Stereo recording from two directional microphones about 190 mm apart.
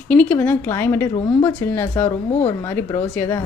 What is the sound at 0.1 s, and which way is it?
A woman's voice, 10° left (ahead or behind).